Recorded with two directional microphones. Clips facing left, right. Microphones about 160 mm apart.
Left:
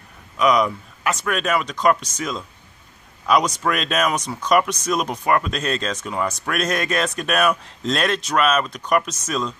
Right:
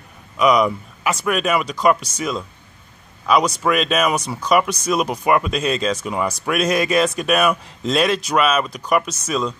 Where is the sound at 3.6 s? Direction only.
5° right (ahead or behind).